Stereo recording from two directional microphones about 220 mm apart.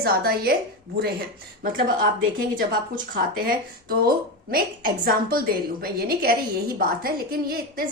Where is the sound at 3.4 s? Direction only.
45° right (ahead or behind).